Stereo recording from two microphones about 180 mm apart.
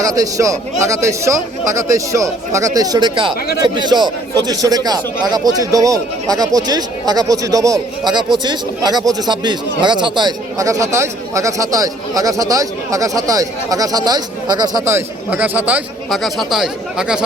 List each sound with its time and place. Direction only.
0.0 s speech: 20° right (ahead or behind); by 17.2 s 5° right (ahead or behind)